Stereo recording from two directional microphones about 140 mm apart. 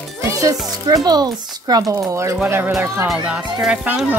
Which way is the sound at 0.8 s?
25° right (ahead or behind).